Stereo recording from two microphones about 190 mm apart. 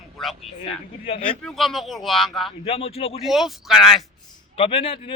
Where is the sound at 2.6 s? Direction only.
30° left (ahead or behind).